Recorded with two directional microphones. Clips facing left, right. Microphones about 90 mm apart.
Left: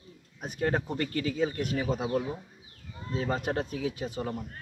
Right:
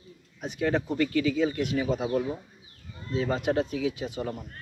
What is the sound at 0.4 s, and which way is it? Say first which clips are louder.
Speech: right 2 dB; 45° left (ahead or behind).